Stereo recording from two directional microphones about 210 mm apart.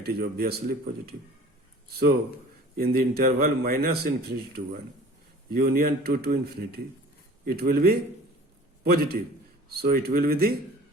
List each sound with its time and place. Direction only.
0.0 s speech: 45° right (ahead or behind)
2.7 s a man's voice: 45° right (ahead or behind)